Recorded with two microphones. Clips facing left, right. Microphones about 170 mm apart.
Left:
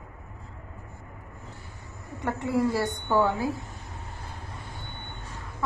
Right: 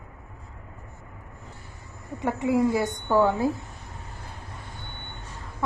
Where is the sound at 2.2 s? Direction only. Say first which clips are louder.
Right 3 dB; 20° right (ahead or behind).